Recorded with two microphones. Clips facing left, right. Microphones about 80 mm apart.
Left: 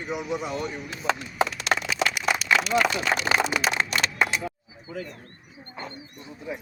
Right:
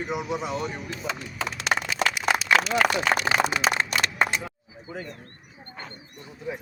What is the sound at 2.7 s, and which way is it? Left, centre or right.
Speech, right.